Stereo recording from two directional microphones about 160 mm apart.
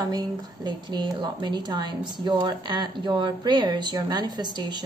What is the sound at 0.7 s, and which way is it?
A woman's voice, 30° right (ahead or behind).